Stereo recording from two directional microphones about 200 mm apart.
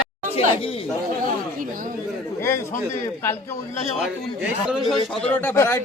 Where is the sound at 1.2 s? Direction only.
40° right (ahead or behind).